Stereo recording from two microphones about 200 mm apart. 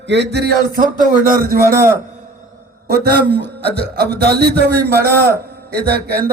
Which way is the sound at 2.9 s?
55° right (ahead or behind).